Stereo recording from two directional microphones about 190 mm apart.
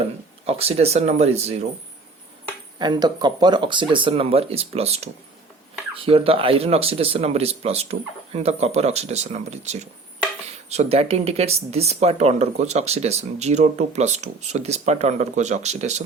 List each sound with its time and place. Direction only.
0.4 s speech: 30° right (ahead or behind)
2.7 s speech: 20° right (ahead or behind)